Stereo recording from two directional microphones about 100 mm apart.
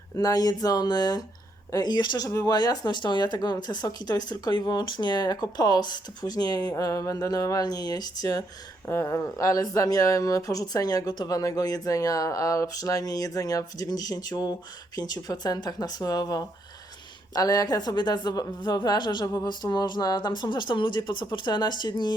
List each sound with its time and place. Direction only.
0.2 s speech: 40° left (ahead or behind)